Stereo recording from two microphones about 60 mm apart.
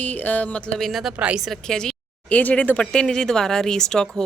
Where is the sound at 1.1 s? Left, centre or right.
Centre.